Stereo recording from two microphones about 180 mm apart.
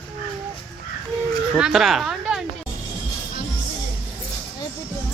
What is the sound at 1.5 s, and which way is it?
Speech, centre (ahead or behind).